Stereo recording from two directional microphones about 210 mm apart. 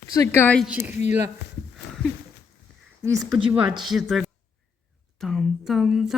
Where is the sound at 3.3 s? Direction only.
25° right (ahead or behind).